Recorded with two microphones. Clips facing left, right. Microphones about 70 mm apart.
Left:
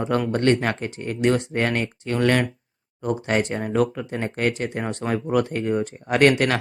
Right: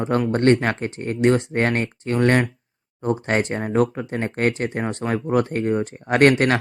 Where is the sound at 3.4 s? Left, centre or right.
Right.